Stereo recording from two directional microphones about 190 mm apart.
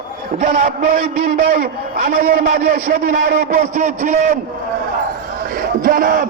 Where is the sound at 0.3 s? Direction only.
45° right (ahead or behind).